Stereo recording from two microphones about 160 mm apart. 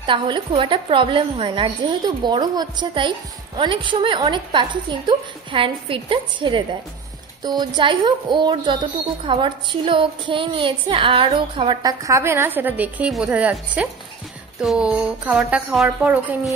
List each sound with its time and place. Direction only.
0.0 s a woman's voice: 30° right (ahead or behind); by 16.3 s 10° right (ahead or behind)